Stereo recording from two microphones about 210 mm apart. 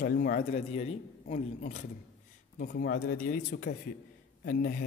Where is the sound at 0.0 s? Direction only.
40° left (ahead or behind).